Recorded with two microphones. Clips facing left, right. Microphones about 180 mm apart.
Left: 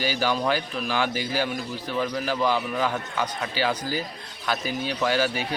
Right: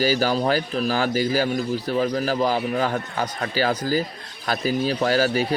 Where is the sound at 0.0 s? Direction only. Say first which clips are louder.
Right 4 dB; 40° right (ahead or behind).